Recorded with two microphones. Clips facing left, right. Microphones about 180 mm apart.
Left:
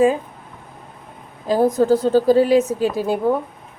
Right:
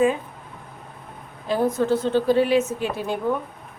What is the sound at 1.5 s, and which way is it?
A woman's voice, 40° left (ahead or behind).